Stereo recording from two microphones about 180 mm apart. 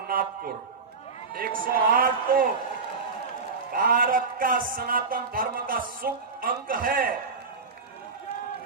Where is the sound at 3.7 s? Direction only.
50° right (ahead or behind).